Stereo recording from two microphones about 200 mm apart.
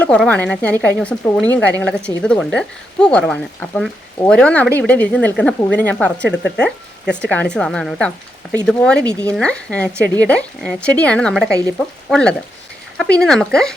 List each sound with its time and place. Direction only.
0.0 s speech: 5° left (ahead or behind)